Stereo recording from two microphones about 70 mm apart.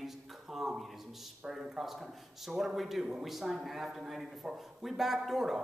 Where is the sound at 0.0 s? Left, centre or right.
Centre.